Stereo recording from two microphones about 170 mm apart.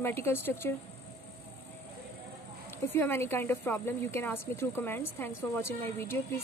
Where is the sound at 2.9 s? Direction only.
15° left (ahead or behind).